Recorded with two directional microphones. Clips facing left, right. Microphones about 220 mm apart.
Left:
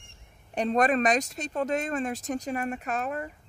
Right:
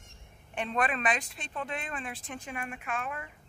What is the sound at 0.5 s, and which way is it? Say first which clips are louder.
A woman's voice: left 8 dB; 40° left (ahead or behind).